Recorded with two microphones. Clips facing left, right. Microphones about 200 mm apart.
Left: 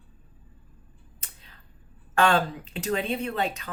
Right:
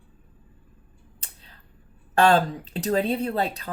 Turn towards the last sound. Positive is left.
turn(degrees=-35)  # may be behind; listen again after turning